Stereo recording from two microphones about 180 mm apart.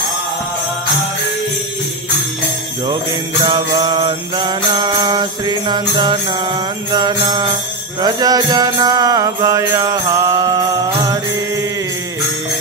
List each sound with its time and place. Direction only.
3.4 s mantra: 25° right (ahead or behind)
8.0 s music: 20° right (ahead or behind)